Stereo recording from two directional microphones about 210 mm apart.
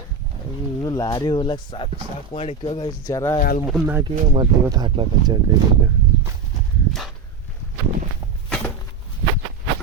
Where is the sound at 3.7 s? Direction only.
10° right (ahead or behind).